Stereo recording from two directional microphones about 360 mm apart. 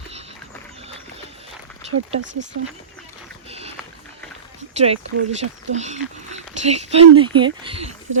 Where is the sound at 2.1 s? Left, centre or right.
Right.